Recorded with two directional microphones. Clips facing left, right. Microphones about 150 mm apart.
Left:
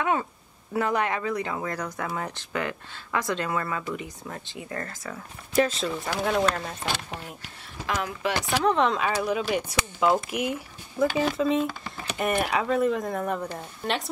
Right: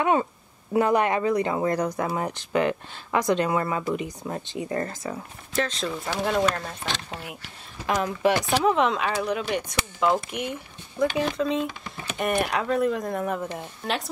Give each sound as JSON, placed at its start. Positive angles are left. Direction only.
{"t": 0.0, "sound": "speech", "side_deg": -20}
{"t": 5.5, "sound": "speech", "side_deg": 10}
{"t": 8.6, "sound": "speech", "side_deg": 0}